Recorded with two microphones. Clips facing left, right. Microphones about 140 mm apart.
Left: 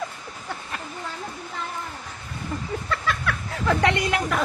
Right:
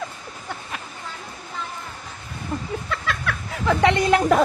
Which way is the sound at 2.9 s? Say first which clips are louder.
Left 2 dB; centre (ahead or behind).